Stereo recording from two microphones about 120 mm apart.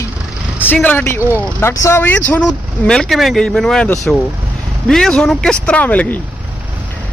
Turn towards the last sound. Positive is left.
turn(degrees=10)  # may be behind; listen again after turning